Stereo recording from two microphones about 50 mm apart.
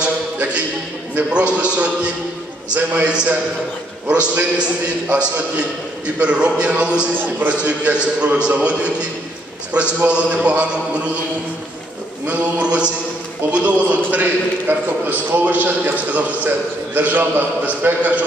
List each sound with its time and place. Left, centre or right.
0.0 s a sound: right
1.3 s a man's voice: right
7.2 s a man's voice: right
12.3 s a man's voice: right